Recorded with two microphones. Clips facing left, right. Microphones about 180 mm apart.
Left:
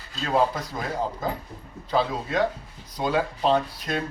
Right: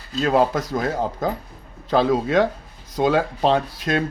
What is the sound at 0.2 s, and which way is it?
Speech, 65° right (ahead or behind).